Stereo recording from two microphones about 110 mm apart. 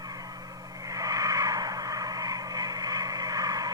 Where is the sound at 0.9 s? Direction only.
30° right (ahead or behind).